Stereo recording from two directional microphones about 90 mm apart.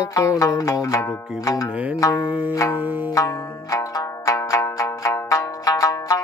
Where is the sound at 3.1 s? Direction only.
40° left (ahead or behind).